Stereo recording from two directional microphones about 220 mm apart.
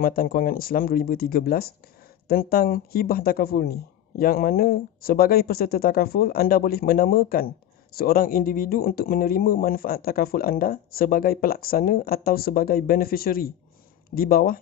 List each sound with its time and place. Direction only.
0.0 s speech: 40° left (ahead or behind)